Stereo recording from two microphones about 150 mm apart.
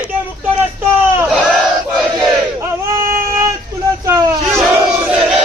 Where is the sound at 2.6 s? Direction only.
20° right (ahead or behind).